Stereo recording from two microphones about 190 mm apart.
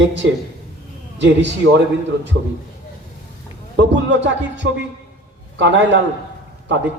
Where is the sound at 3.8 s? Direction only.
70° right (ahead or behind).